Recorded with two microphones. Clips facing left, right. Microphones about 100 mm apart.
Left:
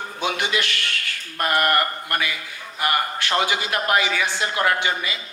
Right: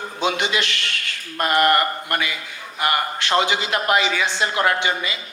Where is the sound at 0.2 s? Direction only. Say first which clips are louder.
Right 2 dB; 20° right (ahead or behind).